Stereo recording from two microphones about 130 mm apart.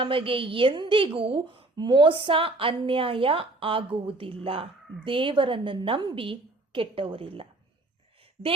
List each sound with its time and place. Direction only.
0.0 s a woman's voice: 45° right (ahead or behind)